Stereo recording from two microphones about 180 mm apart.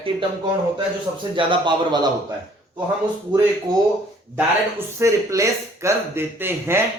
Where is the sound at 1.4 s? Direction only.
25° right (ahead or behind).